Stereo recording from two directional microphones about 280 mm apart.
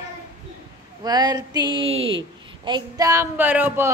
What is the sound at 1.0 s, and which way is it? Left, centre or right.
A woman's voice, centre.